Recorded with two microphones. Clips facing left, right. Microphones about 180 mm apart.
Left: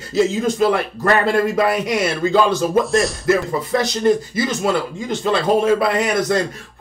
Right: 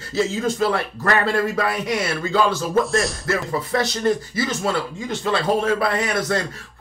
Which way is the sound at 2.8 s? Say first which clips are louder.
Left 4 dB; centre (ahead or behind).